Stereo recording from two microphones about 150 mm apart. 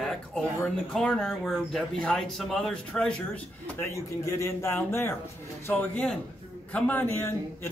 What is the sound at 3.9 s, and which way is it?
A man's voice, 20° left (ahead or behind).